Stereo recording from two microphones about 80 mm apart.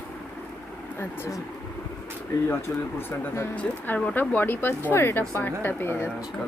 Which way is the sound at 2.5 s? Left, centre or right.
Left.